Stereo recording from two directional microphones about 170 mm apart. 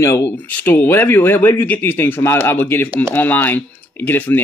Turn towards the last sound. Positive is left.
turn(degrees=10)  # may be behind; listen again after turning